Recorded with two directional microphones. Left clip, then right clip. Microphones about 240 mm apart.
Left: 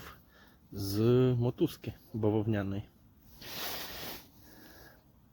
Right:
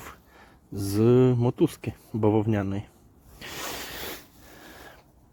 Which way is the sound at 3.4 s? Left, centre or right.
Right.